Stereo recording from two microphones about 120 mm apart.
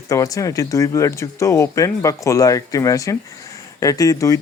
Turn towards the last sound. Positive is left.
turn(degrees=30)  # may be behind; listen again after turning